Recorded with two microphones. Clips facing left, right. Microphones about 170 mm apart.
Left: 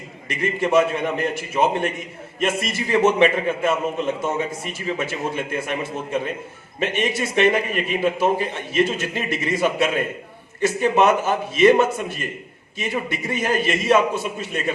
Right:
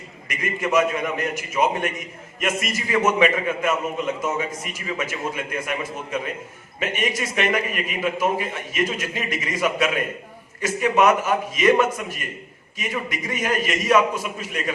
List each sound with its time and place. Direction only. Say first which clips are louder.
0.3 s a man's voice: left 3 dB; 30° left (ahead or behind)